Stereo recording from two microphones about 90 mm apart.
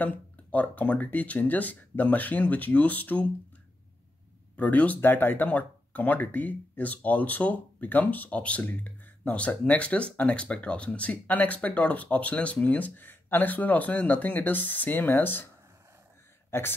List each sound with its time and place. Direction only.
0.0 s speech: 15° left (ahead or behind)
4.6 s speech: 15° left (ahead or behind)
16.4 s a sound: 25° left (ahead or behind)